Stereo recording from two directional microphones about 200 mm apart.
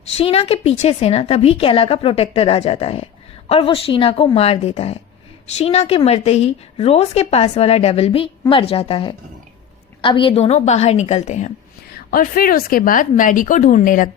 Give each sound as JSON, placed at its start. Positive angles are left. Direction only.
{"t": 0.2, "sound": "a woman's voice", "side_deg": 30}
{"t": 11.9, "sound": "a woman's voice", "side_deg": 45}